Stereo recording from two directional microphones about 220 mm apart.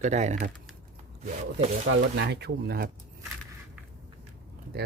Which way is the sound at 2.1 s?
50° right (ahead or behind).